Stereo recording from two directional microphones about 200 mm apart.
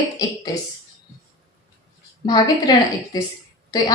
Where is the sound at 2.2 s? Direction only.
20° left (ahead or behind).